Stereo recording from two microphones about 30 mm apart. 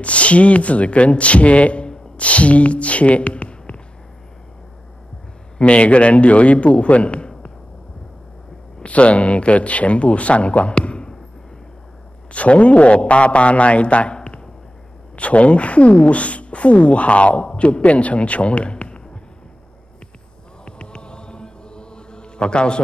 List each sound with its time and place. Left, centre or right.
0.0 s speech: left
5.6 s speech: left
8.8 s speech: left
12.3 s speech: left
20.6 s chant: left